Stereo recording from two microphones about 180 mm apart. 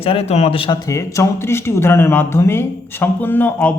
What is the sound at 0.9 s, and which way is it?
A man's voice, 15° left (ahead or behind).